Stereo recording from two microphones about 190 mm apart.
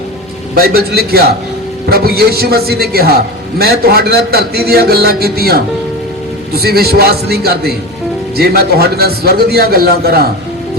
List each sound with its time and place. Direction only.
0.5 s a man's voice: 55° right (ahead or behind)